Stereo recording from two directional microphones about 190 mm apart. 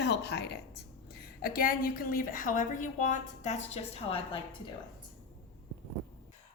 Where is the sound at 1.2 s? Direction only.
50° left (ahead or behind); by 4.4 s 30° left (ahead or behind).